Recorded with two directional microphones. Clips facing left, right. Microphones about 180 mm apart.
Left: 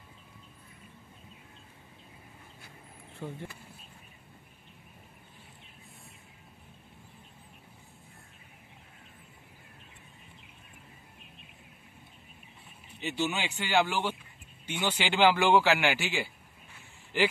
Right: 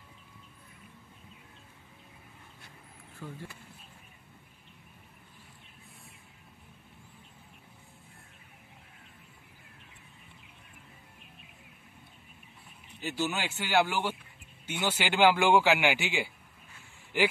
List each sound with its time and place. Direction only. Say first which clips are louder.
3.2 s speech: left 3 dB; 30° left (ahead or behind)
13.0 s speech: left 1 dB; centre (ahead or behind)